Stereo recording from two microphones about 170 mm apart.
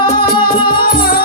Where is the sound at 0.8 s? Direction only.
60° left (ahead or behind).